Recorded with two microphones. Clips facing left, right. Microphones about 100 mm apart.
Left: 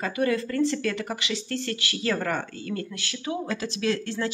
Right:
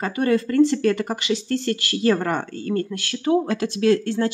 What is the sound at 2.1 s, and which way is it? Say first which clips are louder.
Speech: right 5 dB; 25° right (ahead or behind).